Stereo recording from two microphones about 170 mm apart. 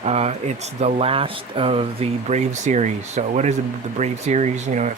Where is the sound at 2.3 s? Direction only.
45° right (ahead or behind).